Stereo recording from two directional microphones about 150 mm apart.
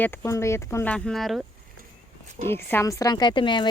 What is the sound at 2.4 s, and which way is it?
Speech, 15° left (ahead or behind).